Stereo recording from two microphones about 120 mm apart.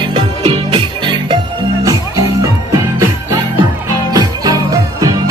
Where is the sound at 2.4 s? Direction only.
30° right (ahead or behind).